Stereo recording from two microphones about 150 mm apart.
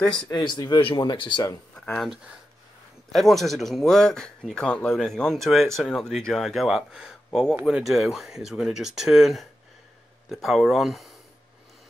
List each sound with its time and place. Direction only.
0.1 s speech: 30° left (ahead or behind)
1.4 s speech: 25° left (ahead or behind)
3.1 s speech: centre (ahead or behind)